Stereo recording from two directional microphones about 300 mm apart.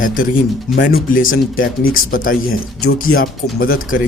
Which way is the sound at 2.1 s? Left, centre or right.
Left.